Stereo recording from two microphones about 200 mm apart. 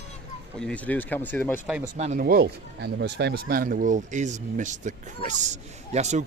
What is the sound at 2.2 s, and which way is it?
Speech, 50° right (ahead or behind).